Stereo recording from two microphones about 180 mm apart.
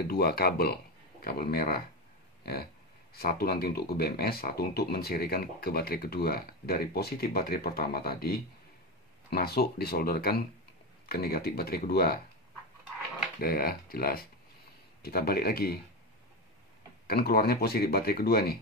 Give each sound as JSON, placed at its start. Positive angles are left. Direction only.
{"t": 0.0, "sound": "speech", "side_deg": 60}
{"t": 3.2, "sound": "speech", "side_deg": 60}
{"t": 13.4, "sound": "speech", "side_deg": 55}
{"t": 17.1, "sound": "speech", "side_deg": 55}